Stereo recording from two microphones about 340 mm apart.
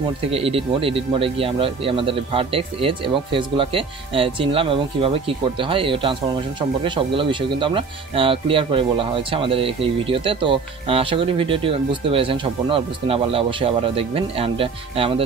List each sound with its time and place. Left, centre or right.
0.3 s speech: centre